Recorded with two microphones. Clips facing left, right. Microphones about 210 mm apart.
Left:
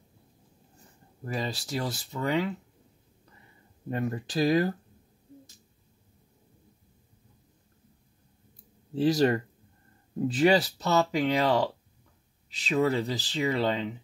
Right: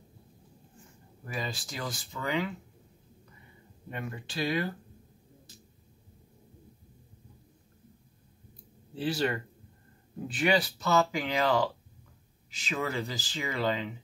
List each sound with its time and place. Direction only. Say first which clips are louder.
0.7 s speech: left 5 dB; 35° left (ahead or behind)
3.9 s speech: left 8 dB; 40° left (ahead or behind)
8.9 s speech: left 7 dB; 40° left (ahead or behind)